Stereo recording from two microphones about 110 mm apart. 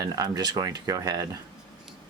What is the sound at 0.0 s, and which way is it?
Speech, 35° right (ahead or behind).